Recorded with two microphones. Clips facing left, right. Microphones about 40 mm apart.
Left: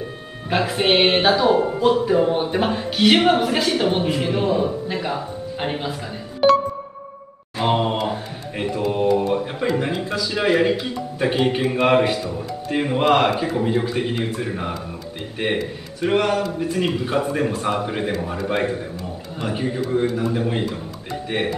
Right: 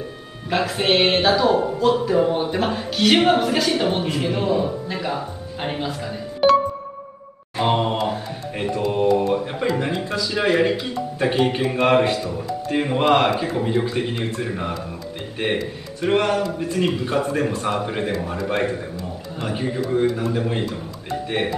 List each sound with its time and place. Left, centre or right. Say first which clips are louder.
0.5 s a man's voice: left 1 dB; centre